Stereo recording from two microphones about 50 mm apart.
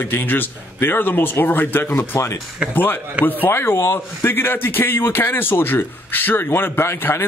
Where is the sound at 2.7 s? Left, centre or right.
Left.